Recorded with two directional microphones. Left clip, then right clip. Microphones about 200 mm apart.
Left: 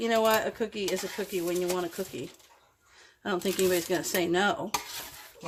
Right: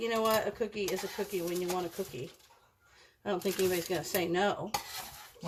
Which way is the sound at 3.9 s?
55° left (ahead or behind).